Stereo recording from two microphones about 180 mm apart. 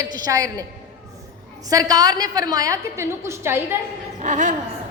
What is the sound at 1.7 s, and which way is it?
A woman's voice, 20° right (ahead or behind).